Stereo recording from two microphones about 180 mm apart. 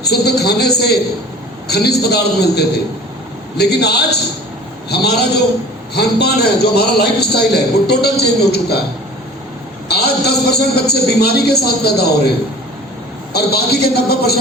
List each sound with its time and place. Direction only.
0.0 s a man's voice: 65° left (ahead or behind)
9.9 s a man's voice: 65° left (ahead or behind)
13.3 s a man's voice: 60° left (ahead or behind)